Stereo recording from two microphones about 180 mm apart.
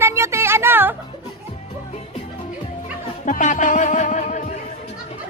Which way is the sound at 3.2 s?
45° left (ahead or behind).